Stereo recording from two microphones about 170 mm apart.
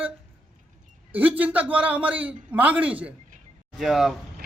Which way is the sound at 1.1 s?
10° right (ahead or behind).